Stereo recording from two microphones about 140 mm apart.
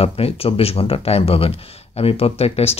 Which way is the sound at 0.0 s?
45° left (ahead or behind).